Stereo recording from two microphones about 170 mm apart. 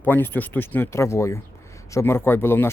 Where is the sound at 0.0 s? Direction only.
10° left (ahead or behind).